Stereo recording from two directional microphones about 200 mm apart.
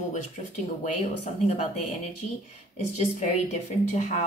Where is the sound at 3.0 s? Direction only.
35° left (ahead or behind).